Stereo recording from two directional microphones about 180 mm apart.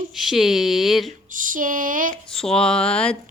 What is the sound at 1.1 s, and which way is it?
Child singing, 50° right (ahead or behind).